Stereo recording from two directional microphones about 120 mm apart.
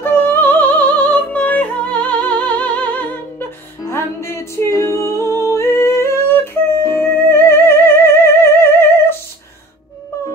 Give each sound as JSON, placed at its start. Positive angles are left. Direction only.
{"t": 0.0, "sound": "music", "side_deg": 15}